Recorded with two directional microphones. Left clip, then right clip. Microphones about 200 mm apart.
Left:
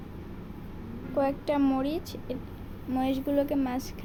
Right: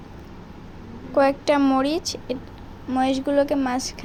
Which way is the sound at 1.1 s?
15° right (ahead or behind).